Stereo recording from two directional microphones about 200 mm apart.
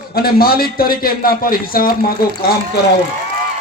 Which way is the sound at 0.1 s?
50° left (ahead or behind).